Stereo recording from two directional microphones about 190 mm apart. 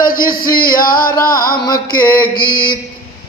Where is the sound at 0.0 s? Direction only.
50° left (ahead or behind).